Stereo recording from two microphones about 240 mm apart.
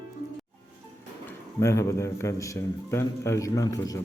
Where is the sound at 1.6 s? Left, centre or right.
Centre.